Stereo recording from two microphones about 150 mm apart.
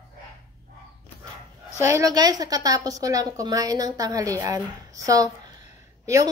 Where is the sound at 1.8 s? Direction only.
20° right (ahead or behind).